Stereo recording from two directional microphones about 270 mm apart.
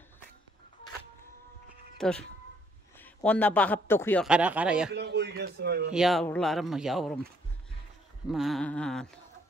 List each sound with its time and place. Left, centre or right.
2.0 s a man's voice: centre
4.3 s speech: centre
4.9 s speech: right
5.9 s speech: centre
8.3 s speech: centre